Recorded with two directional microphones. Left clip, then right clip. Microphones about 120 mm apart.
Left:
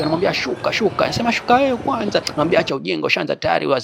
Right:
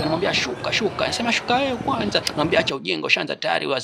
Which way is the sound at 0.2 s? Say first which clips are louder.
Left 3 dB; 40° left (ahead or behind).